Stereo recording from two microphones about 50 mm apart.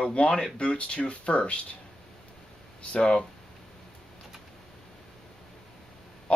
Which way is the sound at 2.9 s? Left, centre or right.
Left.